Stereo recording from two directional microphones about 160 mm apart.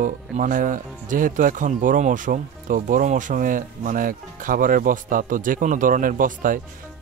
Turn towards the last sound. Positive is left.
turn(degrees=-60)  # may be behind; listen again after turning